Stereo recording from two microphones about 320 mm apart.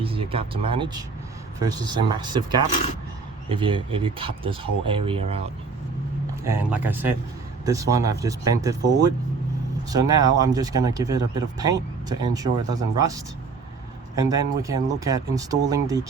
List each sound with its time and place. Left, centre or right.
0.0 s speech: centre
6.4 s speech: centre
9.9 s speech: centre